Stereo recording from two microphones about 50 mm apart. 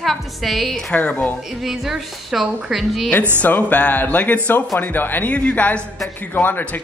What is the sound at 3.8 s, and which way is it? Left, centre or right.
A man's voice, left.